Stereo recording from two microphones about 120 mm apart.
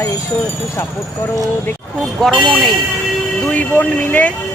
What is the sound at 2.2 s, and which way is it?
Speech, centre (ahead or behind).